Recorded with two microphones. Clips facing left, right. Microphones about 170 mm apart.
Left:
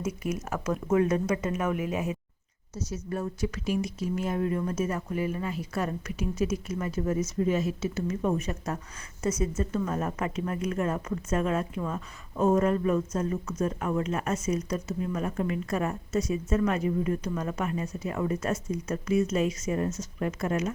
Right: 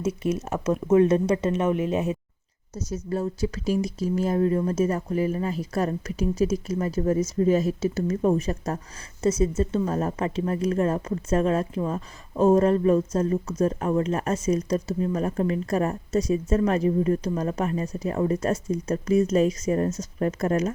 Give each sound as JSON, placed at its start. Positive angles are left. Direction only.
{"t": 0.0, "sound": "speech", "side_deg": -30}